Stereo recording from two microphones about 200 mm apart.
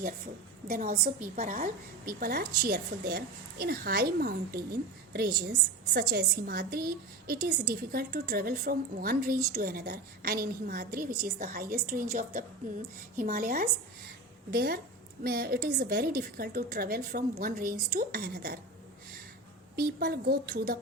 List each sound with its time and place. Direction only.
0.7 s a woman's voice: 45° right (ahead or behind)
20.0 s a woman's voice: 50° right (ahead or behind)